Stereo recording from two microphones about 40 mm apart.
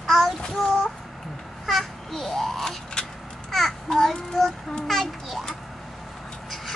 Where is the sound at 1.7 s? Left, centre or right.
Centre.